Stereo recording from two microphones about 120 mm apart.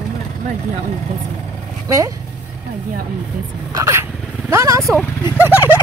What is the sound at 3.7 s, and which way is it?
A man's voice, 25° right (ahead or behind).